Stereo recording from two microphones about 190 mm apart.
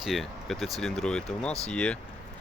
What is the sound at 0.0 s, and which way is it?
Speech, centre (ahead or behind).